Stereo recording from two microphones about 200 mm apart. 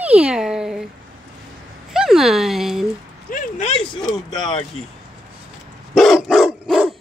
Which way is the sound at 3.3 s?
35° left (ahead or behind).